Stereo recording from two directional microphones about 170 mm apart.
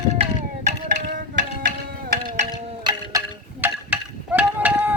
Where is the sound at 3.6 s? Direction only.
10° right (ahead or behind).